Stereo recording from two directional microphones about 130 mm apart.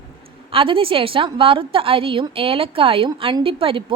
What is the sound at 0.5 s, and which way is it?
A woman's voice, 45° right (ahead or behind).